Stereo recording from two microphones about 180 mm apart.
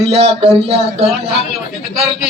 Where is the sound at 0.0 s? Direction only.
35° right (ahead or behind).